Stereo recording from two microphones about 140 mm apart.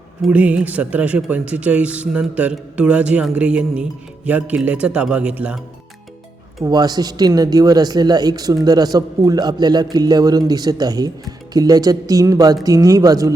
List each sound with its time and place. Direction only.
0.3 s speech: 10° right (ahead or behind)
6.7 s speech: 30° right (ahead or behind)